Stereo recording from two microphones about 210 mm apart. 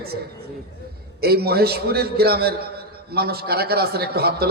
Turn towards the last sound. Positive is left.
turn(degrees=-50)  # may be behind; listen again after turning